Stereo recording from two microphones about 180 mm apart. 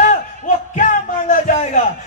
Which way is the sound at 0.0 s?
45° left (ahead or behind).